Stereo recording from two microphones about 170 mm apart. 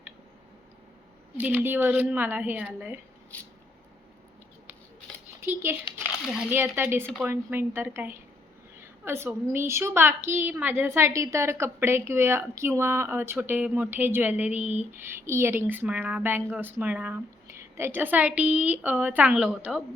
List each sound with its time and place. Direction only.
1.4 s a woman's voice: 10° right (ahead or behind)
5.4 s a woman's voice: 15° right (ahead or behind)